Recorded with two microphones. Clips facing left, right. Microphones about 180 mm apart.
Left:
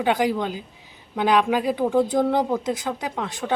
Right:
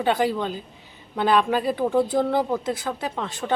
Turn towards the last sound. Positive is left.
turn(degrees=10)  # may be behind; listen again after turning